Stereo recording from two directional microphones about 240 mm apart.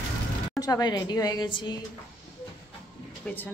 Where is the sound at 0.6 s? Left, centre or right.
Centre.